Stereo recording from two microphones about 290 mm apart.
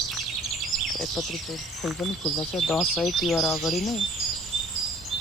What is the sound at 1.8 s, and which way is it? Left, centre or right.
Speech, centre.